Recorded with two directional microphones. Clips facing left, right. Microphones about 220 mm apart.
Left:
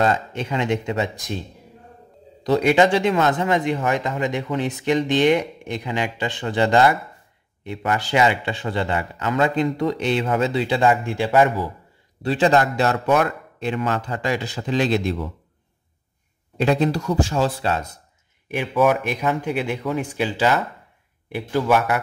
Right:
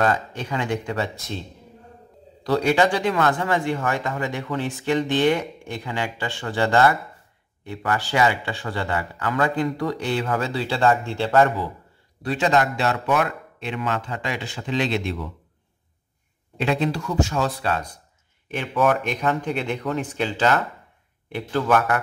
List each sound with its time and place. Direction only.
0.0 s speech: 25° left (ahead or behind)
2.4 s speech: 20° left (ahead or behind)
12.2 s speech: 30° left (ahead or behind)
16.5 s speech: 40° left (ahead or behind)
18.5 s speech: 10° left (ahead or behind)